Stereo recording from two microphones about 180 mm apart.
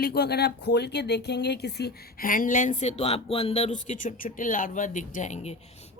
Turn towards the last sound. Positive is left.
turn(degrees=40)  # may be behind; listen again after turning